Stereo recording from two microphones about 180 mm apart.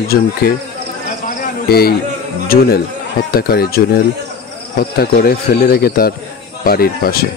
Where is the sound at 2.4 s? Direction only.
55° left (ahead or behind).